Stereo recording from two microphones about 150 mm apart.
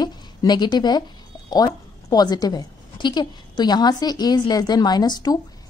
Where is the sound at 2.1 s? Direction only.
25° left (ahead or behind).